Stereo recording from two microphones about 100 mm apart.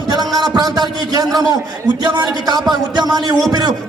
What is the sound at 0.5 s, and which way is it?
Speech, 45° right (ahead or behind).